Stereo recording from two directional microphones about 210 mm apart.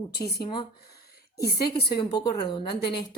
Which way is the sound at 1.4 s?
50° left (ahead or behind).